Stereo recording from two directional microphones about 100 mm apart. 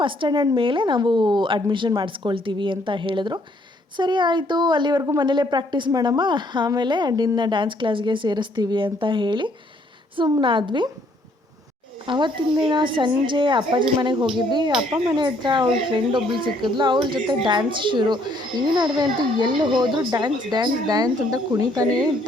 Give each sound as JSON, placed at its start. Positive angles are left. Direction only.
{"t": 0.0, "sound": "a woman's voice", "side_deg": -55}
{"t": 12.0, "sound": "a woman's voice", "side_deg": -50}